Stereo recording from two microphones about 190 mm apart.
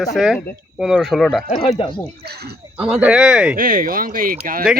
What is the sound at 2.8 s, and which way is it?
Speech, 5° right (ahead or behind).